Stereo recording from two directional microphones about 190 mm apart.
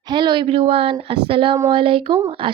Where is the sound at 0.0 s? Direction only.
25° right (ahead or behind).